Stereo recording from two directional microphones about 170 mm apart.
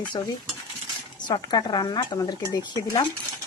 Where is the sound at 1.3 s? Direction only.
25° left (ahead or behind).